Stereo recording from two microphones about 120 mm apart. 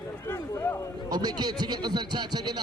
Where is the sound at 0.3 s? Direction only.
20° left (ahead or behind).